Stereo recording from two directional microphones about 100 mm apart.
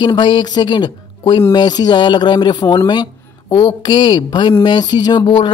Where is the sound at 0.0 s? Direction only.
50° left (ahead or behind).